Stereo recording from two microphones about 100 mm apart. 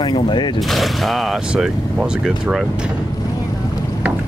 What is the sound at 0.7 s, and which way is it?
Speech, centre (ahead or behind).